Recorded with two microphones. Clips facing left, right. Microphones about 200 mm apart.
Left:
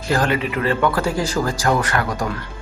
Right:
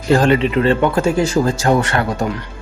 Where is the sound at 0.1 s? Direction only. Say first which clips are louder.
Right 7 dB; 25° right (ahead or behind).